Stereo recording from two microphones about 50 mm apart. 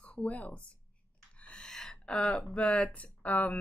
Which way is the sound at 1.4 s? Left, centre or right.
Left.